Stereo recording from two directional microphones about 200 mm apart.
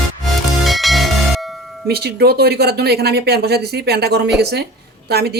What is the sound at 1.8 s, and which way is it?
Speech, 55° right (ahead or behind).